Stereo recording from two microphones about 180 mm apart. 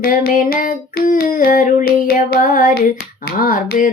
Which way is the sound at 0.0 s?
50° left (ahead or behind).